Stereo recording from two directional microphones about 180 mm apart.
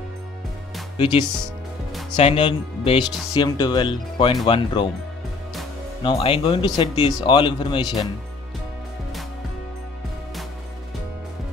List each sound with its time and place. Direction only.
0.9 s speech: 25° left (ahead or behind)
6.0 s speech: 30° left (ahead or behind)